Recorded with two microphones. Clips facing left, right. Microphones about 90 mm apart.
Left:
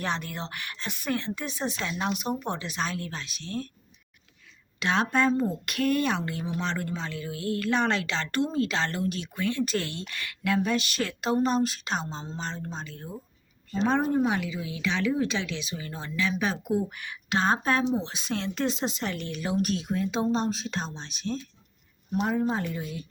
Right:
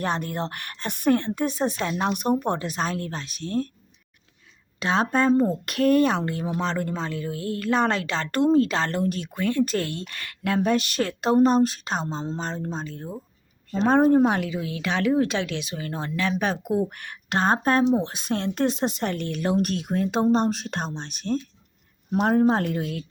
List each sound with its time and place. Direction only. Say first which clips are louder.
0.0 s speech: right 5 dB; 40° right (ahead or behind)
4.8 s speech: right 3 dB; 35° right (ahead or behind)
13.8 s speech: right 7 dB; 50° right (ahead or behind)
22.1 s speech: right 7 dB; 70° right (ahead or behind)